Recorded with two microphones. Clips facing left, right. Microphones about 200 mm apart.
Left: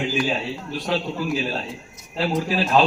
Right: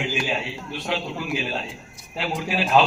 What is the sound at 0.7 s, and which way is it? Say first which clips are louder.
A man's voice: left 3 dB; 40° left (ahead or behind).